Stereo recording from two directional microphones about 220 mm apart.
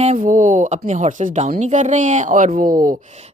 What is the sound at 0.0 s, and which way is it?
A woman's voice, 35° right (ahead or behind).